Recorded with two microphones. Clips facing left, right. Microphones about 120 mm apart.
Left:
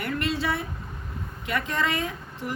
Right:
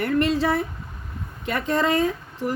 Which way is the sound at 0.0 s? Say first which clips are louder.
Right 7 dB; 40° right (ahead or behind).